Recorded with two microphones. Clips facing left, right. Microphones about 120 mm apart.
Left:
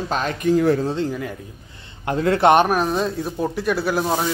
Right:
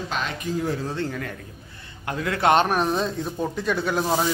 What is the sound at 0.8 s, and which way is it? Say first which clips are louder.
Speech: left 5 dB; 15° left (ahead or behind).